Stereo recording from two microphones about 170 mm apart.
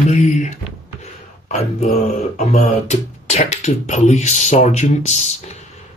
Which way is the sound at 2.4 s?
40° left (ahead or behind).